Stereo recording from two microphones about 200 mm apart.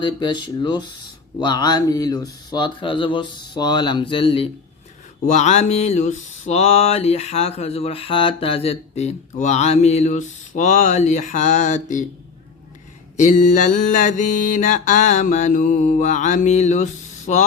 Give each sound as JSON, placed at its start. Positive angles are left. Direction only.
{"t": 0.0, "sound": "speech", "side_deg": 25}
{"t": 5.2, "sound": "mantra", "side_deg": 35}
{"t": 13.1, "sound": "mantra", "side_deg": 35}